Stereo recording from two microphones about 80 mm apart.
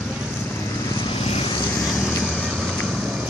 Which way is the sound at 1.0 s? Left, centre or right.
Left.